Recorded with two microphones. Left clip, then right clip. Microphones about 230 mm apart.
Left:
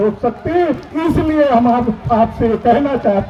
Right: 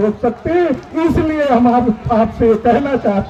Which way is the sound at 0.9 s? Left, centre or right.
Right.